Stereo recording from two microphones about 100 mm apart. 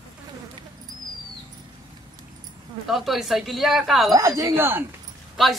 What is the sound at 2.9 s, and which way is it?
Speech, centre (ahead or behind).